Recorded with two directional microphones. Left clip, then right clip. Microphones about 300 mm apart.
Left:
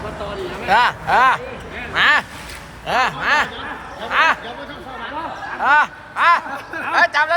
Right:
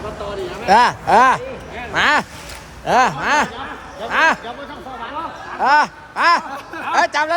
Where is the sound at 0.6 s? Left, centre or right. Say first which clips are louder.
Right 3 dB; right.